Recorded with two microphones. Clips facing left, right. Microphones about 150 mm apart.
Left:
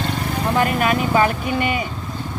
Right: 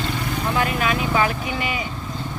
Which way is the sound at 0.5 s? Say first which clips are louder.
Left 4 dB; 45° left (ahead or behind).